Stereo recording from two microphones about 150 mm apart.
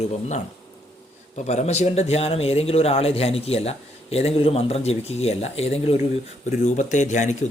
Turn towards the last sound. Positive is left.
turn(degrees=55)  # may be behind; listen again after turning